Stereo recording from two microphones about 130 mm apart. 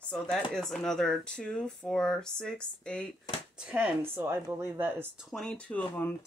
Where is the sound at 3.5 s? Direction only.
5° right (ahead or behind).